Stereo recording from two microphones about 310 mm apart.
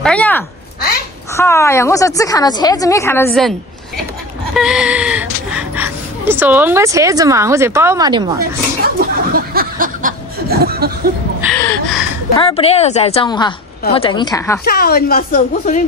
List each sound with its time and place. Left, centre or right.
0.0 s a child's voice: centre
4.6 s speech: centre
8.4 s speech: right
11.5 s gasp: centre
12.4 s a woman's voice: centre
14.6 s speech: left